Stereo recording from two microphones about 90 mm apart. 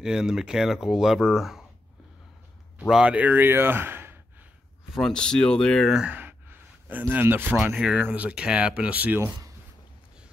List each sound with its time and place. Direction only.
0.0 s speech: 5° right (ahead or behind)
2.9 s speech: 10° right (ahead or behind)
4.9 s speech: 5° left (ahead or behind)
6.1 s a sound: 25° right (ahead or behind)
7.7 s speech: 10° right (ahead or behind)